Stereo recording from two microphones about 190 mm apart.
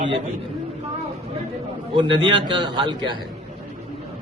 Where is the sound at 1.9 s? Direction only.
25° right (ahead or behind).